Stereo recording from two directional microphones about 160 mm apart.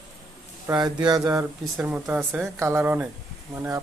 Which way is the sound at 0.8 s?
25° right (ahead or behind).